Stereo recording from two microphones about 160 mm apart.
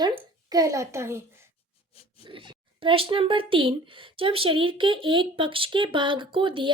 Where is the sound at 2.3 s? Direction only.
30° right (ahead or behind).